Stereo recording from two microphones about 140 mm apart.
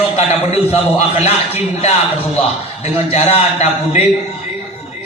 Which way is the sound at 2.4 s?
50° left (ahead or behind).